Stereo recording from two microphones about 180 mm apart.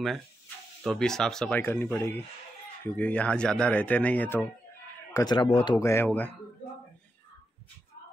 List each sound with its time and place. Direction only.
0.8 s speech: 5° left (ahead or behind)
5.1 s speech: 25° left (ahead or behind)